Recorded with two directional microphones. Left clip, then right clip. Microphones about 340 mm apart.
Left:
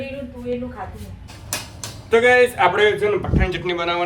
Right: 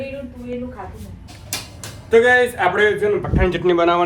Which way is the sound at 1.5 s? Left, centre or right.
Centre.